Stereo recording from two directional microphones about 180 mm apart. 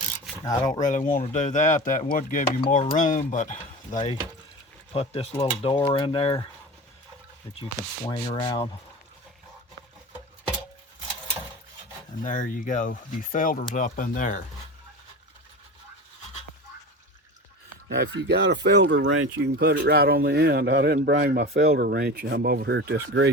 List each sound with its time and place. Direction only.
0.4 s rub: 20° left (ahead or behind)
0.8 s speech: 45° left (ahead or behind)
4.9 s speech: 35° left (ahead or behind)
5.9 s rub: 30° left (ahead or behind)
8.0 s rub: 25° left (ahead or behind)
12.2 s speech: 45° left (ahead or behind)
17.8 s speech: 75° right (ahead or behind)